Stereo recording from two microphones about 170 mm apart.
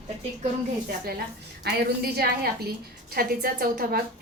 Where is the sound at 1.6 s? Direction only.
65° right (ahead or behind).